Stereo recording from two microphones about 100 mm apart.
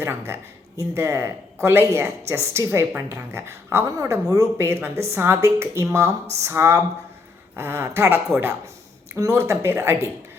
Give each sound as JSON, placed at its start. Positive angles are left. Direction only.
{"t": 0.0, "sound": "speech", "side_deg": -25}